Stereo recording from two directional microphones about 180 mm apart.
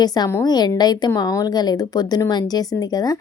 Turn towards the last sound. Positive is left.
turn(degrees=20)  # may be behind; listen again after turning